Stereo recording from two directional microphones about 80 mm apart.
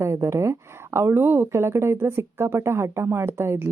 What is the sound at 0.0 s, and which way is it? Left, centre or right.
A woman's voice, right.